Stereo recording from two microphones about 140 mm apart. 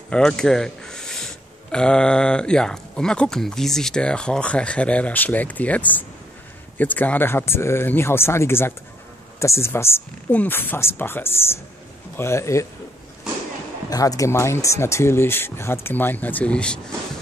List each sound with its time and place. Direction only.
0.1 s speech: 5° left (ahead or behind)
13.8 s speech: 25° left (ahead or behind); by 16.8 s 5° left (ahead or behind)